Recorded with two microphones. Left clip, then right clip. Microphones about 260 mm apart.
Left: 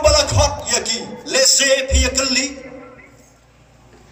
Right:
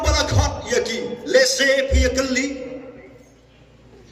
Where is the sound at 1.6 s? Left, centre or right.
Centre.